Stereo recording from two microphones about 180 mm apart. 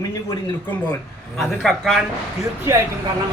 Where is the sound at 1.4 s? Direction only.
Centre (ahead or behind).